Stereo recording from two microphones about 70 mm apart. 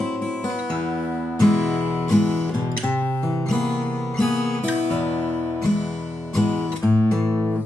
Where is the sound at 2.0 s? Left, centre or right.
Centre.